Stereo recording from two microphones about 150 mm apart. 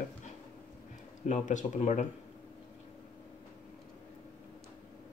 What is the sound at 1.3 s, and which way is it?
Speech, 50° left (ahead or behind).